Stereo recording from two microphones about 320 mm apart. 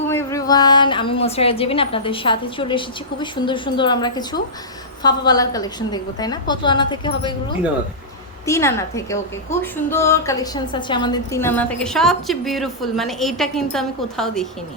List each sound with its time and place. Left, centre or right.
0.1 s a woman's voice: centre
8.4 s a woman's voice: centre